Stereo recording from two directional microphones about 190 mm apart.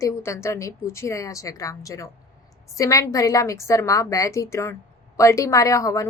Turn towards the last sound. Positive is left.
turn(degrees=15)  # may be behind; listen again after turning